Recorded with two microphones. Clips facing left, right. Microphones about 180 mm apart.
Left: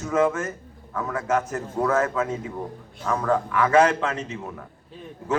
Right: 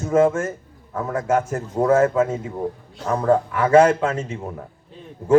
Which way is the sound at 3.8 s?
50° right (ahead or behind).